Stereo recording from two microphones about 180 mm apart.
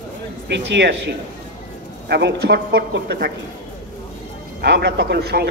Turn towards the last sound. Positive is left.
turn(degrees=-65)  # may be behind; listen again after turning